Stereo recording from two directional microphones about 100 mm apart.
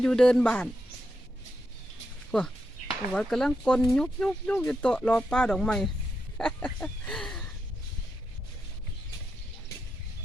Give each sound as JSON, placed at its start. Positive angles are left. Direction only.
{"t": 0.0, "sound": "speech", "side_deg": 10}
{"t": 2.3, "sound": "speech", "side_deg": 5}
{"t": 6.3, "sound": "a sound", "side_deg": 10}